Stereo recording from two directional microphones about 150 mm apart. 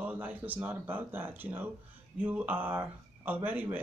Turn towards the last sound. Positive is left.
turn(degrees=-10)  # may be behind; listen again after turning